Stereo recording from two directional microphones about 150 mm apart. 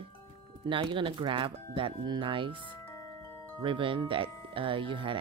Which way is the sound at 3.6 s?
35° right (ahead or behind).